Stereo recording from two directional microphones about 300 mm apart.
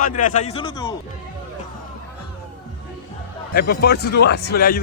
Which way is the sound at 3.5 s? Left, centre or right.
Left.